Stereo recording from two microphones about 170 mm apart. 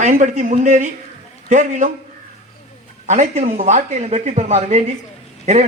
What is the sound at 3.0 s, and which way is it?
Speech, 45° right (ahead or behind).